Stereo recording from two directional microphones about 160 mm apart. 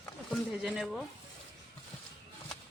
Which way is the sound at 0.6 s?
5° right (ahead or behind).